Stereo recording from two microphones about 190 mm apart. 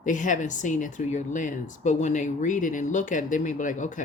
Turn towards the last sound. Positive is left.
turn(degrees=45)  # may be behind; listen again after turning